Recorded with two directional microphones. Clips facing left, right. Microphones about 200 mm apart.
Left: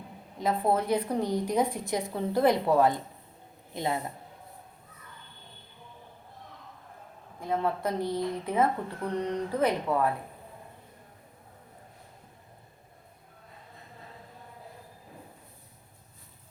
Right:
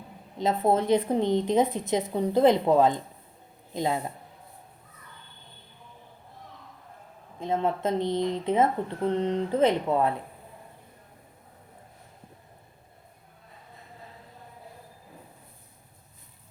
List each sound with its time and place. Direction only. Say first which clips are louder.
0.3 s speech: right 3 dB; 25° right (ahead or behind)
7.3 s speech: right 2 dB; 20° right (ahead or behind)